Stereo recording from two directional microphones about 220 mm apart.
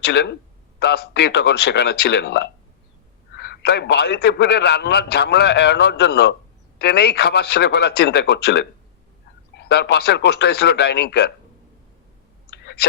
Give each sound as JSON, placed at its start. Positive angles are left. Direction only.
{"t": 0.0, "sound": "a man's voice", "side_deg": 50}